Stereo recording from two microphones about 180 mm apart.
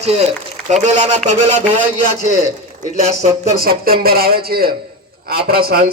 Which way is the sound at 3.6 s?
55° right (ahead or behind).